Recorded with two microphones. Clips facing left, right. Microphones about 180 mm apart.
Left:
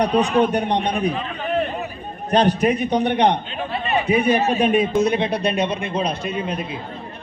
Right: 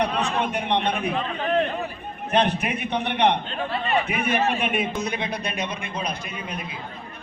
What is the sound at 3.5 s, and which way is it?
Speech, 15° left (ahead or behind).